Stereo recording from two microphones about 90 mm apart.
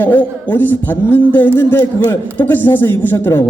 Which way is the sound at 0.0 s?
20° left (ahead or behind).